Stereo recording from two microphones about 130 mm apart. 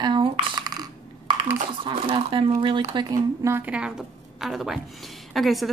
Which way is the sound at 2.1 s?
45° right (ahead or behind).